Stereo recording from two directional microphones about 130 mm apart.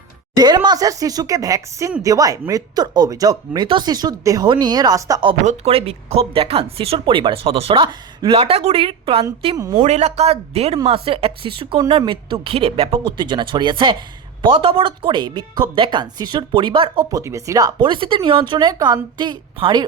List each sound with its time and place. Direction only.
0.3 s a woman's voice: 30° right (ahead or behind)
5.5 s speech: 50° right (ahead or behind)
9.6 s speech: 30° right (ahead or behind)
9.8 s a woman's voice: 60° right (ahead or behind); by 17.0 s 45° right (ahead or behind)
17.1 s a woman's voice: 25° right (ahead or behind)